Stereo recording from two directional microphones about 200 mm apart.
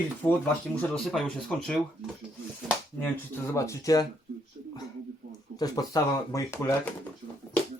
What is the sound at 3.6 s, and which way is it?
Speech, 15° left (ahead or behind).